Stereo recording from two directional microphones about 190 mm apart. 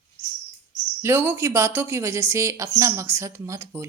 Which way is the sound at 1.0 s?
10° right (ahead or behind).